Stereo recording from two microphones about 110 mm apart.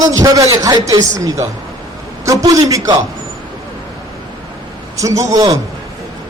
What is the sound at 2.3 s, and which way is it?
Speech, 30° right (ahead or behind).